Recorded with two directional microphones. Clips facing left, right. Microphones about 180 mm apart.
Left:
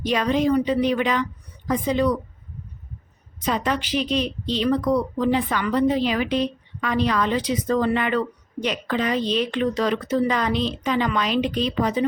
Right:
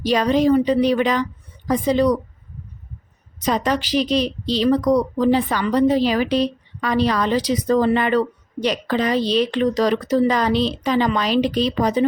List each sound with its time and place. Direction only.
0.0 s a woman's voice: 35° right (ahead or behind)
3.4 s a woman's voice: 40° right (ahead or behind)